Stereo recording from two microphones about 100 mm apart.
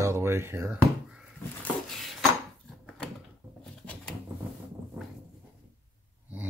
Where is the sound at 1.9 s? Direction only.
Centre (ahead or behind).